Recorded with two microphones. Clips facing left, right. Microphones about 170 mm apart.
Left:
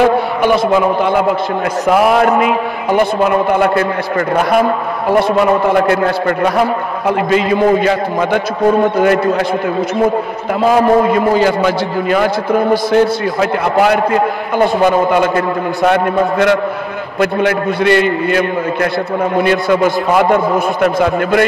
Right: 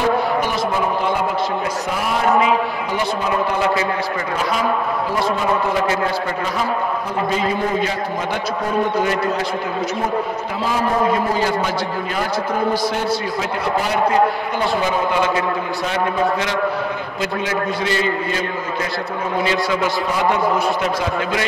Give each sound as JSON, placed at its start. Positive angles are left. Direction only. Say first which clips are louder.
{"t": 0.4, "sound": "a man's voice", "louder": "left 8 dB", "side_deg": 70}
{"t": 1.9, "sound": "a man's voice", "louder": "left 10 dB", "side_deg": 65}
{"t": 10.6, "sound": "a man's voice", "louder": "left 9 dB", "side_deg": 60}
{"t": 14.6, "sound": "a man's voice", "louder": "left 9 dB", "side_deg": 55}